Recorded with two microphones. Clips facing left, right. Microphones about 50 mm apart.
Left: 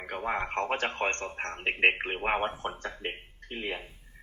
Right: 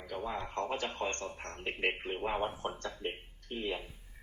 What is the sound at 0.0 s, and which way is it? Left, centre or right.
Speech, left.